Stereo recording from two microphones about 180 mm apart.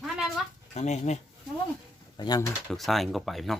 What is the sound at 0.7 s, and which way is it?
Speech, 40° left (ahead or behind).